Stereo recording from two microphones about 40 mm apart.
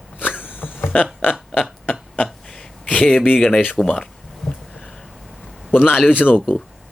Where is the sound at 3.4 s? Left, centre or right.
Centre.